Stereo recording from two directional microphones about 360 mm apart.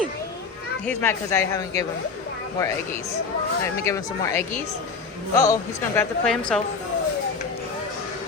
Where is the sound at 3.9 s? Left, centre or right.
Centre.